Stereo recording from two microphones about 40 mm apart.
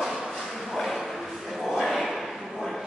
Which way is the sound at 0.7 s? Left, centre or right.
Centre.